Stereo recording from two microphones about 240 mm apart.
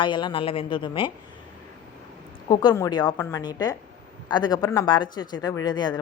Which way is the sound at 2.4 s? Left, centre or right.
Centre.